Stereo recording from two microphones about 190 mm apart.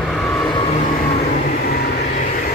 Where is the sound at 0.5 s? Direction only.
35° left (ahead or behind).